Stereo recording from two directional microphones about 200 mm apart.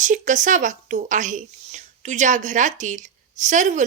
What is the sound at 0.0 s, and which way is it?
A woman's voice, 40° right (ahead or behind).